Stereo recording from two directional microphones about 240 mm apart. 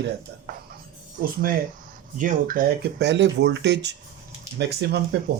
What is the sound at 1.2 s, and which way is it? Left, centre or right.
Speech, right.